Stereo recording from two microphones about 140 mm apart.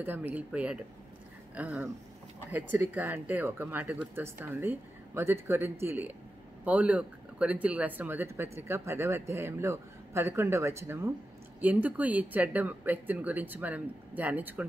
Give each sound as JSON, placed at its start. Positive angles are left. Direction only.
{"t": 0.0, "sound": "speech", "side_deg": -10}